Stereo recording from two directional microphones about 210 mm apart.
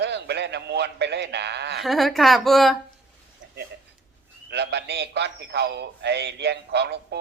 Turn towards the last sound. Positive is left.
turn(degrees=-50)  # may be behind; listen again after turning